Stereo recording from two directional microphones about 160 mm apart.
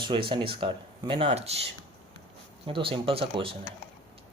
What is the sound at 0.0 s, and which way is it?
Speech, 30° right (ahead or behind).